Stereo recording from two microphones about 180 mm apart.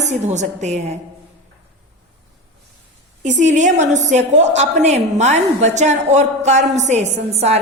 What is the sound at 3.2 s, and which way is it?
A woman's voice, 40° right (ahead or behind).